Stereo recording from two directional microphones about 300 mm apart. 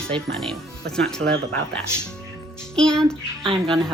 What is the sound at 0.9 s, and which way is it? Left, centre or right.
Speech, centre.